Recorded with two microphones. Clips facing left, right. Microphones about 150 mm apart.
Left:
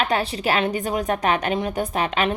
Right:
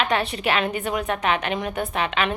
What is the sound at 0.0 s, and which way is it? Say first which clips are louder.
A woman's voice: left 1 dB; 35° left (ahead or behind).